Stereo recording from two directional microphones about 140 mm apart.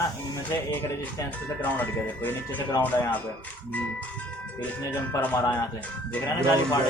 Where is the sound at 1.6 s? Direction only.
10° left (ahead or behind).